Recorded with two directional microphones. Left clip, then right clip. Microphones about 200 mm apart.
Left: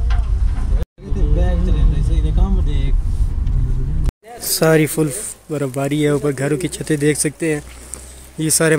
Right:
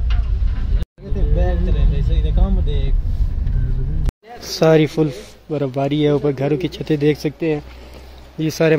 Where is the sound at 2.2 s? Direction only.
45° right (ahead or behind).